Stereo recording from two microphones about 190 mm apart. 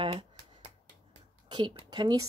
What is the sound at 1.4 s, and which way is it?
Speech, 25° right (ahead or behind).